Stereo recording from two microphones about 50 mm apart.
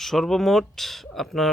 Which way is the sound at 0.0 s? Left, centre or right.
Centre.